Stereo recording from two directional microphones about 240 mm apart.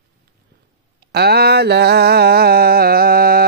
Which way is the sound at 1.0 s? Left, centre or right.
Right.